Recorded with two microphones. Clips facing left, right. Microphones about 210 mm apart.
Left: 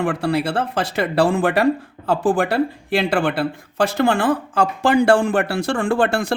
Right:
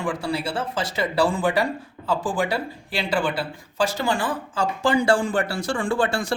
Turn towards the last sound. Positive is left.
turn(degrees=60)  # may be behind; listen again after turning